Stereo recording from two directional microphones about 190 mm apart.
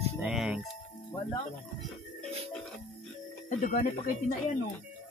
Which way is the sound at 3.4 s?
40° left (ahead or behind).